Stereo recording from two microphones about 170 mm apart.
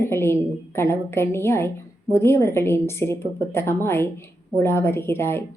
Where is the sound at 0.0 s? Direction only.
15° left (ahead or behind).